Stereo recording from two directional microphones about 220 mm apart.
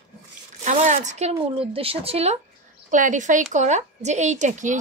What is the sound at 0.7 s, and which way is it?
Speech, 30° right (ahead or behind).